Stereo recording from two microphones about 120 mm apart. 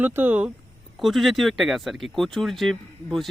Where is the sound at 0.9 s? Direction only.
Centre (ahead or behind).